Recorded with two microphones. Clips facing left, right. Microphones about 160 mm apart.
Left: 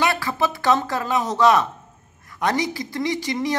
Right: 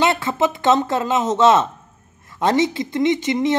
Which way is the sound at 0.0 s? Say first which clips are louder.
Right 4 dB; 20° right (ahead or behind).